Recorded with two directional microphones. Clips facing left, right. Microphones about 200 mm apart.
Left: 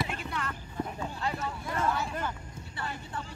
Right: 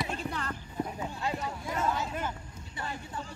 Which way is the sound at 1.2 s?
15° right (ahead or behind).